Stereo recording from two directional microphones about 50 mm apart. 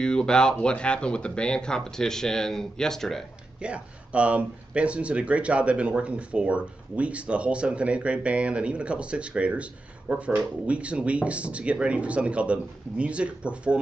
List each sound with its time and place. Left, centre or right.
0.0 s speech: centre
3.6 s speech: right